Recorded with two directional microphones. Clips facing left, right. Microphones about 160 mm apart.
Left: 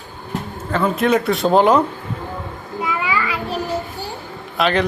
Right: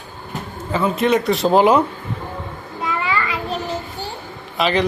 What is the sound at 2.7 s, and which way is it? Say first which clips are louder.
Child singing: left 1 dB; 10° left (ahead or behind).